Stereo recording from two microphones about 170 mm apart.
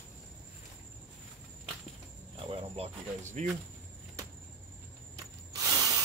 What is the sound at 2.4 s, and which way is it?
Cricket, 35° right (ahead or behind).